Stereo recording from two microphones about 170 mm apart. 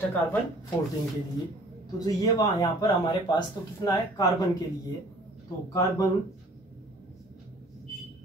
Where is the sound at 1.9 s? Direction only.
20° left (ahead or behind).